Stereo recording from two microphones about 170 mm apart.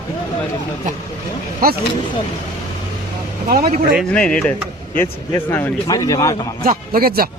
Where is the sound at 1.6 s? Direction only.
60° right (ahead or behind).